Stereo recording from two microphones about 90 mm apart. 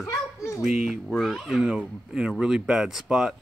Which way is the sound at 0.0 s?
35° left (ahead or behind).